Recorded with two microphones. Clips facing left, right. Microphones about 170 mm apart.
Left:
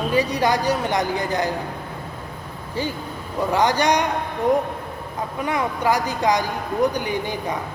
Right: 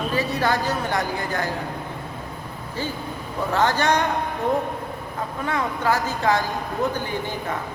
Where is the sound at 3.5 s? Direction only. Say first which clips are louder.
Left 1 dB; 15° left (ahead or behind).